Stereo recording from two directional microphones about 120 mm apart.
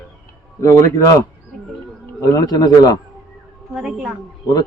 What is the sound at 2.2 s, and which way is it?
Speech, 30° left (ahead or behind).